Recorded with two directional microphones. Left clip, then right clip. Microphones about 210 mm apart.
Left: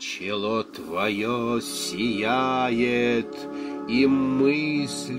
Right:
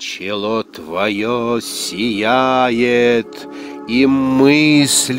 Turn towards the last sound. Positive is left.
turn(degrees=-50)  # may be behind; listen again after turning